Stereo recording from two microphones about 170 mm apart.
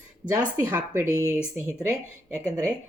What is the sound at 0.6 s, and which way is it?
Mantra, 15° right (ahead or behind).